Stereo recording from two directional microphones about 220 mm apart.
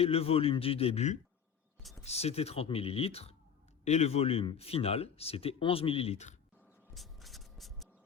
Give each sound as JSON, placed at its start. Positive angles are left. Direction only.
{"t": 0.0, "sound": "speech", "side_deg": 25}
{"t": 1.8, "sound": "speech", "side_deg": 0}
{"t": 2.0, "sound": "speech", "side_deg": 30}
{"t": 6.9, "sound": "spray", "side_deg": 0}